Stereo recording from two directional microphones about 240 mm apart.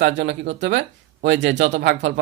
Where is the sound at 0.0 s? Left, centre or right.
Right.